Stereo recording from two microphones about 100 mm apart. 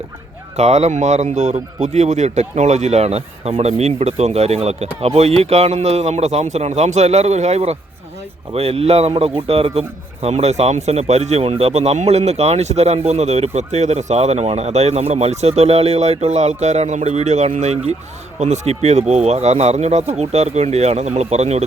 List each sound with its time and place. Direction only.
0.5 s speech: 90° right
1.9 s speech: 90° right